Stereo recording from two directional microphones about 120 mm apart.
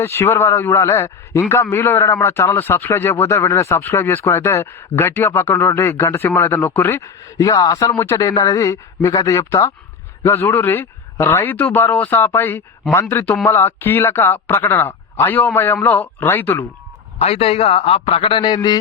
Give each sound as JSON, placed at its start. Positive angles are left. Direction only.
{"t": 0.0, "sound": "speech", "side_deg": 20}
{"t": 7.3, "sound": "speech", "side_deg": 30}
{"t": 17.2, "sound": "a man's voice", "side_deg": 60}